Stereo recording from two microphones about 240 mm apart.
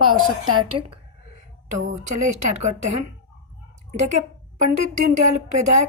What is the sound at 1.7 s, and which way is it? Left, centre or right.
A woman's voice, right.